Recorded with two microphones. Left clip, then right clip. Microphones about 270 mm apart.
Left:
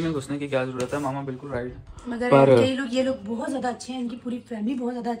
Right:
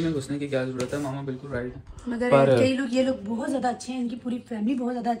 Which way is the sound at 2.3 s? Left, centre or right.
Left.